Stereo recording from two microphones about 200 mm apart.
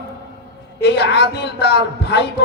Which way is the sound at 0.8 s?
55° left (ahead or behind).